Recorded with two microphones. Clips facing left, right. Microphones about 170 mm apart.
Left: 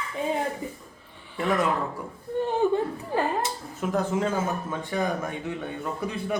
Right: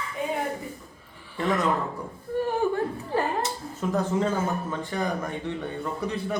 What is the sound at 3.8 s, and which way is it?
Speech, 5° left (ahead or behind).